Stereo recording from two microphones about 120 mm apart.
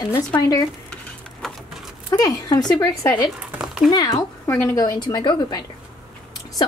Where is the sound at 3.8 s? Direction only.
30° left (ahead or behind).